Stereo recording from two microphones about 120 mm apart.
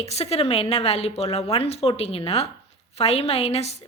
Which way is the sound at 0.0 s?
60° left (ahead or behind).